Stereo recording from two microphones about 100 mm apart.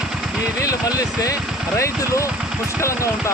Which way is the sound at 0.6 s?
35° left (ahead or behind).